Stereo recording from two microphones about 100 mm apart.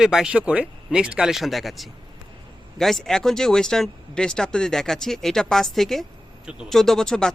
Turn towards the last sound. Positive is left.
turn(degrees=5)  # may be behind; listen again after turning